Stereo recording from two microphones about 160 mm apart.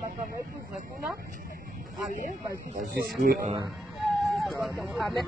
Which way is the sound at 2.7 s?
55° right (ahead or behind).